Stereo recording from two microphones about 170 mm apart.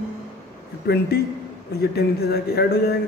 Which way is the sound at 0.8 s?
70° left (ahead or behind).